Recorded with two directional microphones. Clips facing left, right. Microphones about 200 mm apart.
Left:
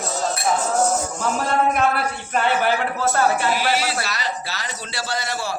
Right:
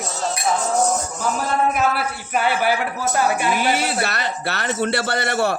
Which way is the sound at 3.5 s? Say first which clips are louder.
Right 2 dB; 55° right (ahead or behind).